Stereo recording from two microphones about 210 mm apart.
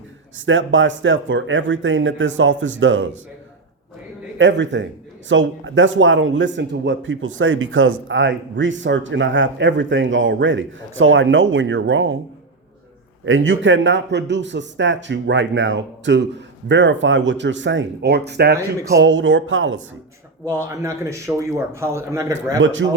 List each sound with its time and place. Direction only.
0.3 s a man's voice: 65° right (ahead or behind)
4.4 s a man's voice: 60° right (ahead or behind)
13.2 s a man's voice: 65° right (ahead or behind)
20.4 s speech: 10° right (ahead or behind)
22.6 s a man's voice: 60° right (ahead or behind)